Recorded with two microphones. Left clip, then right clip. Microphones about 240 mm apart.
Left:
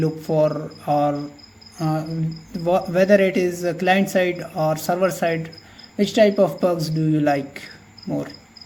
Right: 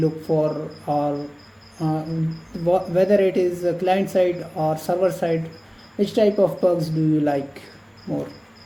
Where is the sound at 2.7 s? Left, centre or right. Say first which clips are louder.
Left 2 dB; left.